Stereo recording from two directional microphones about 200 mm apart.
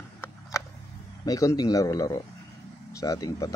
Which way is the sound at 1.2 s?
15° left (ahead or behind).